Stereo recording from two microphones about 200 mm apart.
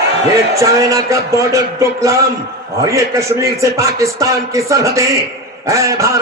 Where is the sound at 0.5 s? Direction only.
15° right (ahead or behind).